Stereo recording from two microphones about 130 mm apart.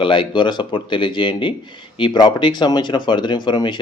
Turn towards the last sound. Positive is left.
turn(degrees=35)  # may be behind; listen again after turning